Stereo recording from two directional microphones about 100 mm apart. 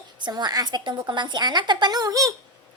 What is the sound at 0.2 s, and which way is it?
A woman's voice, 45° right (ahead or behind).